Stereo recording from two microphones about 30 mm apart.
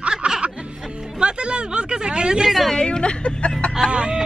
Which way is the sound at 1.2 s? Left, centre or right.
Right.